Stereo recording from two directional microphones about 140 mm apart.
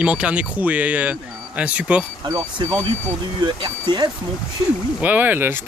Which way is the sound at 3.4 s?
35° right (ahead or behind).